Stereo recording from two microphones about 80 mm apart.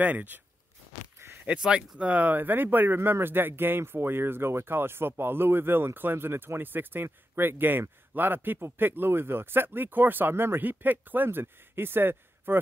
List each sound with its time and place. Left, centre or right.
0.0 s speech: right
1.4 s speech: centre